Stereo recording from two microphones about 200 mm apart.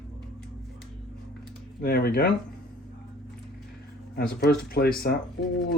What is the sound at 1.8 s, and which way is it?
Speech, 50° left (ahead or behind).